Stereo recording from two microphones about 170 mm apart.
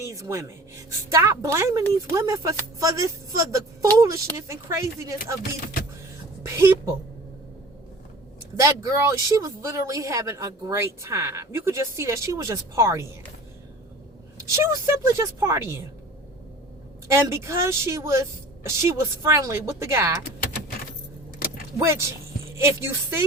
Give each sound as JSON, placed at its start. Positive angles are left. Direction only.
{"t": 0.1, "sound": "speech", "side_deg": -15}
{"t": 5.5, "sound": "speech", "side_deg": 55}
{"t": 6.4, "sound": "speech", "side_deg": -15}
{"t": 8.5, "sound": "speech", "side_deg": -15}
{"t": 14.3, "sound": "speech", "side_deg": -15}
{"t": 17.1, "sound": "speech", "side_deg": -15}
{"t": 22.6, "sound": "speech", "side_deg": -15}